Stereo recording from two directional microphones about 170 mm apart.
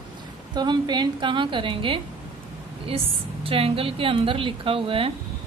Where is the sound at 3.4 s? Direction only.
35° right (ahead or behind).